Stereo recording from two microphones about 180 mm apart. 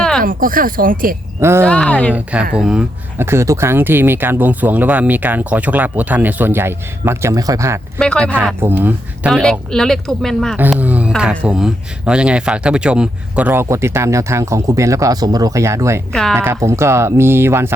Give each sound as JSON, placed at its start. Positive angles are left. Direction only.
{"t": 0.2, "sound": "speech", "side_deg": -50}
{"t": 1.4, "sound": "speech", "side_deg": -15}
{"t": 1.6, "sound": "speech", "side_deg": 5}
{"t": 2.6, "sound": "speech", "side_deg": -5}
{"t": 7.9, "sound": "speech", "side_deg": 5}
{"t": 8.6, "sound": "speech", "side_deg": -10}
{"t": 9.3, "sound": "speech", "side_deg": 5}
{"t": 10.6, "sound": "speech", "side_deg": -10}